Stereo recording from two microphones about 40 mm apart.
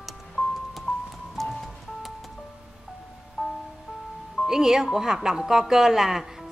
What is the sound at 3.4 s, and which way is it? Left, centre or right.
Music, centre.